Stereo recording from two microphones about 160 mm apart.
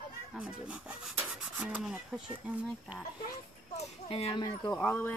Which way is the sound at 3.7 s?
35° left (ahead or behind).